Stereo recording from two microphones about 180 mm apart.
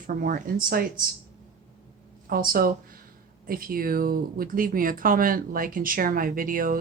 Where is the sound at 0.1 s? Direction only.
50° right (ahead or behind).